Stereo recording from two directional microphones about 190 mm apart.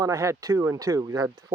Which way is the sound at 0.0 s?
15° right (ahead or behind).